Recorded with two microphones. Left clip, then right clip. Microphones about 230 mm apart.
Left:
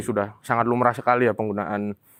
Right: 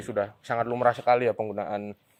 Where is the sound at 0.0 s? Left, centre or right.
Left.